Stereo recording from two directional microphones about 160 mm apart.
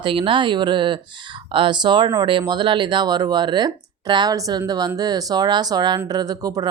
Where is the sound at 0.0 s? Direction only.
30° right (ahead or behind).